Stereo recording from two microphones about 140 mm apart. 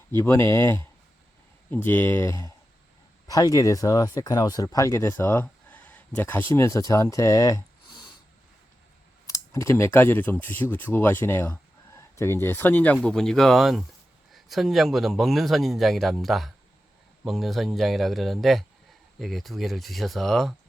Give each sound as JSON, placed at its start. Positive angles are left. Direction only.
{"t": 0.1, "sound": "speech", "side_deg": 20}
{"t": 9.2, "sound": "speech", "side_deg": 20}